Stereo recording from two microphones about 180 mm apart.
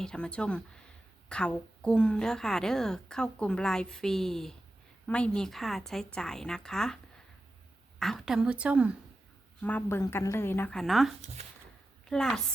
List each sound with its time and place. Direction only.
0.0 s a woman's voice: 5° left (ahead or behind)
9.6 s a woman's voice: 10° left (ahead or behind)